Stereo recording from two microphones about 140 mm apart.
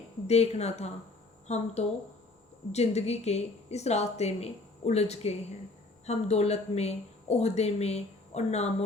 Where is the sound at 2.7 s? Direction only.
50° left (ahead or behind).